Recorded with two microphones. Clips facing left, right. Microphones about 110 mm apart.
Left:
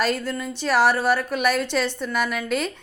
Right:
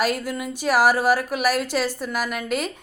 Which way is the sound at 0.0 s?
10° right (ahead or behind).